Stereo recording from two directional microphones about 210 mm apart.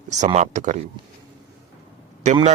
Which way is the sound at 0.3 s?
35° right (ahead or behind).